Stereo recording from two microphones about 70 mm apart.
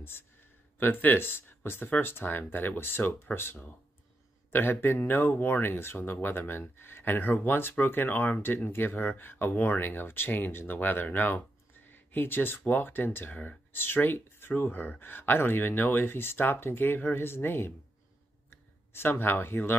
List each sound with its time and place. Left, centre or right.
0.7 s speech: left